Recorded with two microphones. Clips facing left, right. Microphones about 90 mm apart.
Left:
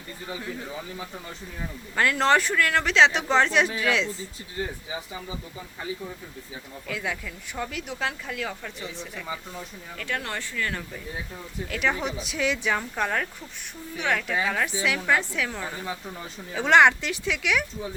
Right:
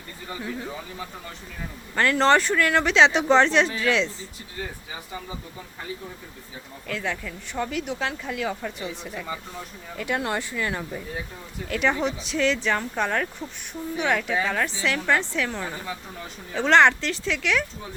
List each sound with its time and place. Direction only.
2.0 s speech: 5° left (ahead or behind)
6.8 s speech: 5° left (ahead or behind)
10.0 s speech: 15° right (ahead or behind)
11.7 s speech: centre (ahead or behind)